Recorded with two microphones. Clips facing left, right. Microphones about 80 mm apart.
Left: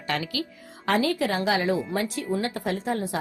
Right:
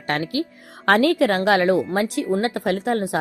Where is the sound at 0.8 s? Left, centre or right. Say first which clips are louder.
Right 7 dB; right.